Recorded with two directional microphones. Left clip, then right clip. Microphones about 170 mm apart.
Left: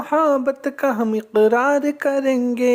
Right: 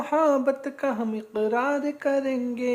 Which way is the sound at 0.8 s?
40° left (ahead or behind).